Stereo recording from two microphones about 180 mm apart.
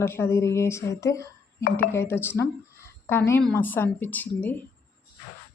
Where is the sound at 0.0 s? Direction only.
15° left (ahead or behind).